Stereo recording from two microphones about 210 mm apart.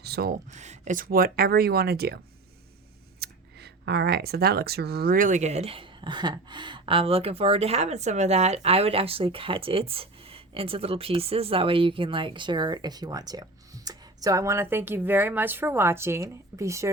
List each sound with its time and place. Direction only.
0.0 s a sound: 50° right (ahead or behind)
0.5 s speech: 35° right (ahead or behind); by 2.1 s 50° right (ahead or behind)
3.2 s speech: 50° right (ahead or behind); by 16.9 s 15° right (ahead or behind)